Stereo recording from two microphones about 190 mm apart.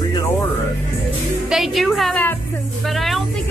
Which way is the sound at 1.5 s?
Centre (ahead or behind).